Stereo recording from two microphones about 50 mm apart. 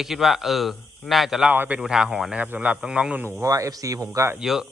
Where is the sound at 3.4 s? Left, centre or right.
Right.